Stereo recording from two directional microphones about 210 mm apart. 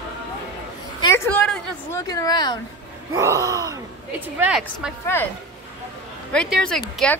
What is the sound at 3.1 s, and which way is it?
Speech, 15° right (ahead or behind).